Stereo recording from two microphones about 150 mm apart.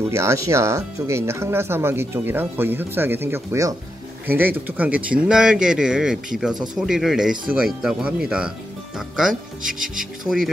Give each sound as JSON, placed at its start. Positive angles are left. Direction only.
{"t": 0.1, "sound": "speech", "side_deg": -20}
{"t": 9.3, "sound": "speech", "side_deg": -60}
{"t": 10.2, "sound": "speech", "side_deg": 0}